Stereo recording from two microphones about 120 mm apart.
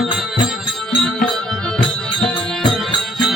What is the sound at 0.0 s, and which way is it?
Music, centre (ahead or behind).